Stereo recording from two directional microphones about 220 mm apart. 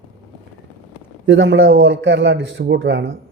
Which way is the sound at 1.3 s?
55° right (ahead or behind).